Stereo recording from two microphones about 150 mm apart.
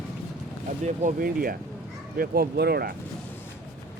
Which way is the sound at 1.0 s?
70° right (ahead or behind).